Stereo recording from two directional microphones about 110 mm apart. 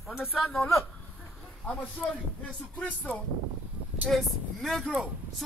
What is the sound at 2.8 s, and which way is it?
Speech, 15° left (ahead or behind).